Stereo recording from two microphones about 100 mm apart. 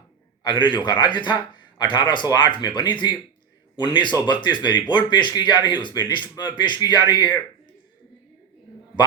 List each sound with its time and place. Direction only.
0.4 s speech: 50° left (ahead or behind)